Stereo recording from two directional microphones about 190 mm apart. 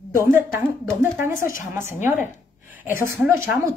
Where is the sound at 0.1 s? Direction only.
15° right (ahead or behind).